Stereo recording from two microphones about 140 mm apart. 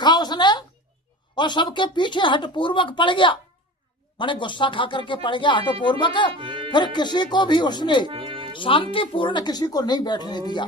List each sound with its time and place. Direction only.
0.0 s a sound: 30° left (ahead or behind)
1.4 s speech: 30° left (ahead or behind)
6.3 s music: 40° right (ahead or behind)
6.7 s speech: 30° left (ahead or behind)
8.0 s music: 40° right (ahead or behind)
8.5 s speech: 40° left (ahead or behind)